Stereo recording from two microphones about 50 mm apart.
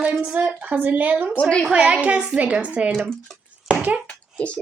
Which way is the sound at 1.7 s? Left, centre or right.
Right.